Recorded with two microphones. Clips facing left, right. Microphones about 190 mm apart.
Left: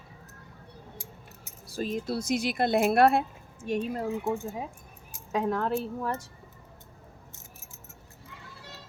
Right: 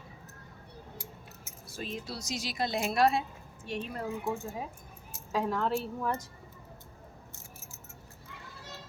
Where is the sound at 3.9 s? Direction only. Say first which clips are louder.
Left 5 dB; 20° left (ahead or behind).